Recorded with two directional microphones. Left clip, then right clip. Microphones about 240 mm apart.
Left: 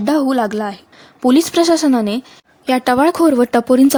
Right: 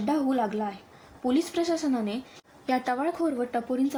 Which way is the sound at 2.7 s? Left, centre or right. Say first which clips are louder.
Left 13 dB; left.